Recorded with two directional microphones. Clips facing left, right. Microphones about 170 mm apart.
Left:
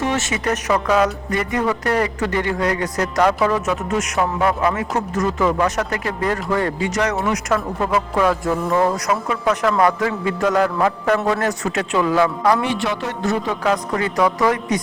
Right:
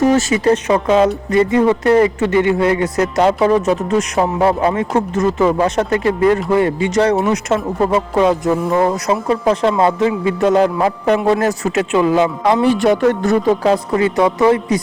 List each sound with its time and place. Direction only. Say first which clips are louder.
0.0 s speech: right 8 dB; 40° right (ahead or behind); by 6.9 s 20° right (ahead or behind)
6.9 s speech: right 8 dB; 30° right (ahead or behind)
9.3 s speech: right 5 dB; 30° right (ahead or behind)
12.6 s a woman's voice: right 10 dB; 45° right (ahead or behind)
13.5 s speech: right 6 dB; 30° right (ahead or behind)